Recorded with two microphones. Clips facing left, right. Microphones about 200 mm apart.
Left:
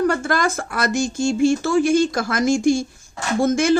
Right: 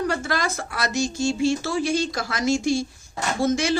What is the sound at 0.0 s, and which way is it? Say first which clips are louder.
A woman's voice: left 5 dB; 50° left (ahead or behind).